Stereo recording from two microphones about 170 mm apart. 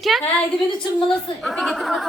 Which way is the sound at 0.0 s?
Centre (ahead or behind).